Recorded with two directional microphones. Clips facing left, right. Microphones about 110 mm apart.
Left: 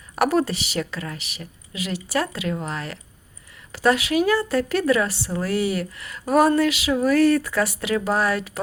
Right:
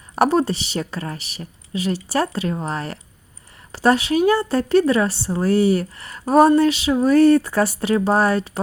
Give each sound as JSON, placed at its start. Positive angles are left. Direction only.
{"t": 0.2, "sound": "a woman's voice", "side_deg": -30}